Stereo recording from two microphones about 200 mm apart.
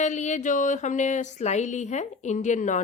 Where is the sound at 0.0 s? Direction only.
35° left (ahead or behind).